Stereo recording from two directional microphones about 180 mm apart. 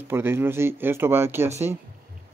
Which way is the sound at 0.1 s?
10° right (ahead or behind).